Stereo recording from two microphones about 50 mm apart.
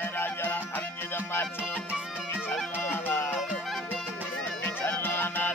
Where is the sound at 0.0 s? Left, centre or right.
Left.